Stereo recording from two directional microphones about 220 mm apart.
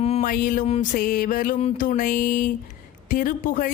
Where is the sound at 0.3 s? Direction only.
40° left (ahead or behind).